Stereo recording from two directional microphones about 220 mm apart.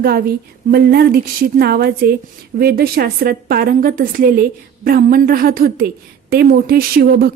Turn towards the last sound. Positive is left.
turn(degrees=-45)  # may be behind; listen again after turning